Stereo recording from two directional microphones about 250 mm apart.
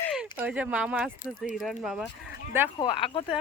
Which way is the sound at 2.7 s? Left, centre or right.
Centre.